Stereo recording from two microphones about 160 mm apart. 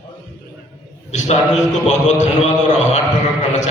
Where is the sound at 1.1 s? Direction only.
45° left (ahead or behind).